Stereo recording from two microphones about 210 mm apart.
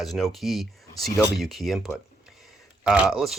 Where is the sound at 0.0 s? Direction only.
Centre (ahead or behind).